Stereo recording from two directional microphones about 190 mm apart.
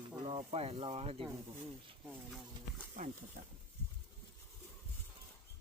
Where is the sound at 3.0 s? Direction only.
45° right (ahead or behind).